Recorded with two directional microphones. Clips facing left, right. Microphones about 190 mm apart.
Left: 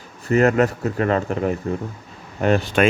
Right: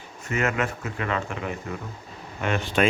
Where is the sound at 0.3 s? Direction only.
35° left (ahead or behind).